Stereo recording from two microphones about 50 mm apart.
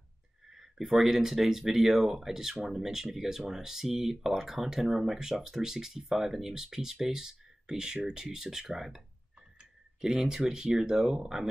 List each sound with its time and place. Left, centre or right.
0.5 s speech: centre